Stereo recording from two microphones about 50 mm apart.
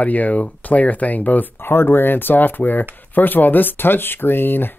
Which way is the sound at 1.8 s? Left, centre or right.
Left.